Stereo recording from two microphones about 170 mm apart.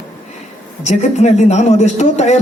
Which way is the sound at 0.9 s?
45° left (ahead or behind).